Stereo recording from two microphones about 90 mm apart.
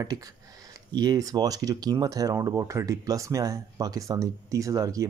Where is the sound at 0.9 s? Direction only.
45° right (ahead or behind).